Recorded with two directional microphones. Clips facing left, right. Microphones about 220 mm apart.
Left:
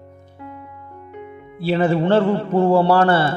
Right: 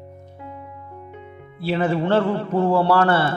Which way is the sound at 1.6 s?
30° left (ahead or behind).